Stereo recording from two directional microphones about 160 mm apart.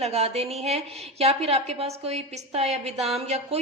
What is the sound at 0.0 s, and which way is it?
A woman's voice, 40° right (ahead or behind).